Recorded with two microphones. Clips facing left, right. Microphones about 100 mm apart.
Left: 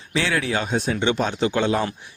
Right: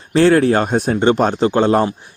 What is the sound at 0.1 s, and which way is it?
A man's voice, 45° right (ahead or behind).